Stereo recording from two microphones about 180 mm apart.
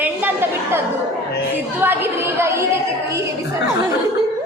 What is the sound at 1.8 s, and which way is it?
Speech, 10° right (ahead or behind).